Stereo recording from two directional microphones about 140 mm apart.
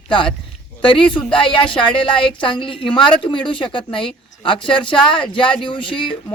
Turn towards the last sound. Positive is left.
turn(degrees=35)  # may be behind; listen again after turning